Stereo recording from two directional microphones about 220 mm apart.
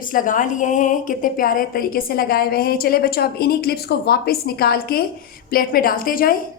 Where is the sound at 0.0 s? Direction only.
40° left (ahead or behind).